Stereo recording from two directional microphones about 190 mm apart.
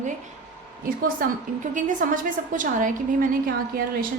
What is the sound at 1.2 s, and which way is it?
A woman's voice, 50° right (ahead or behind).